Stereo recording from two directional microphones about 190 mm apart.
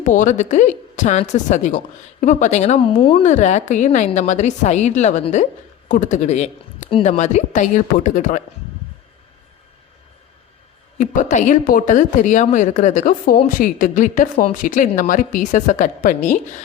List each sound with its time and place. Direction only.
0.0 s a woman's voice: 40° left (ahead or behind)
10.9 s a woman's voice: 45° left (ahead or behind)